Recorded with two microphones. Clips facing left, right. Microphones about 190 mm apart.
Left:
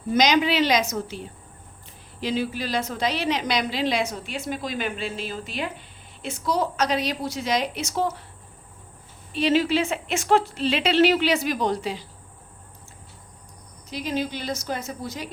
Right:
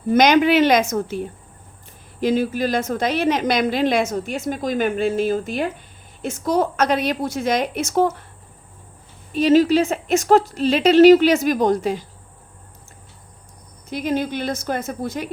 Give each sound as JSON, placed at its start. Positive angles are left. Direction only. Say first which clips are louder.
{"t": 0.1, "sound": "a woman's voice", "louder": "right 6 dB", "side_deg": -55}
{"t": 9.3, "sound": "a woman's voice", "louder": "right 7 dB", "side_deg": -45}
{"t": 13.9, "sound": "a woman's voice", "louder": "right 5 dB", "side_deg": -55}